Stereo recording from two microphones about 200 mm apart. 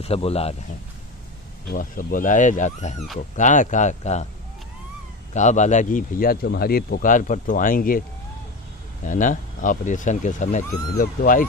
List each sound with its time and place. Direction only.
0.0 s speech: 30° left (ahead or behind)
1.7 s speech: 45° left (ahead or behind)
5.3 s speech: 35° left (ahead or behind)
9.0 s speech: 40° left (ahead or behind)